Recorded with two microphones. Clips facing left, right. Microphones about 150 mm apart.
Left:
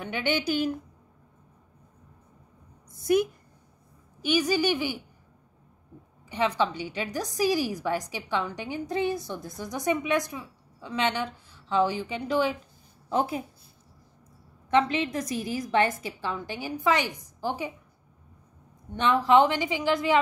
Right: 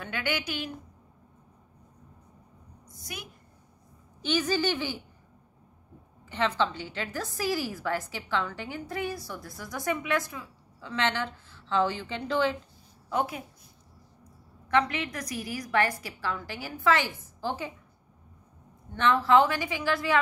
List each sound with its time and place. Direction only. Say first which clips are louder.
0.0 s a woman's voice: left 4 dB; 20° left (ahead or behind)
4.2 s a woman's voice: left 3 dB; 10° left (ahead or behind)
6.2 s a woman's voice: left 2 dB; 15° left (ahead or behind)
13.1 s a woman's voice: left 3 dB; 30° left (ahead or behind)
14.7 s a woman's voice: left 3 dB; 25° left (ahead or behind)
18.9 s a woman's voice: left 1 dB; 20° left (ahead or behind)